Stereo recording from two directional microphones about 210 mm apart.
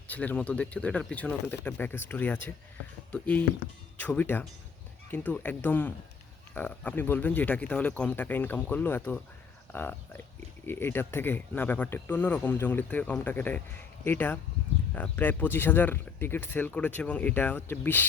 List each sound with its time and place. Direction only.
0.1 s speech: 5° left (ahead or behind)